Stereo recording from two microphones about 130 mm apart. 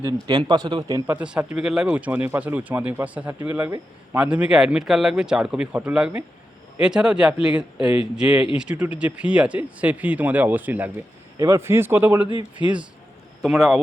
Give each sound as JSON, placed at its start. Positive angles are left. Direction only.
{"t": 0.3, "sound": "a man's voice", "side_deg": -35}
{"t": 1.1, "sound": "speech", "side_deg": -10}
{"t": 11.3, "sound": "a man's voice", "side_deg": -25}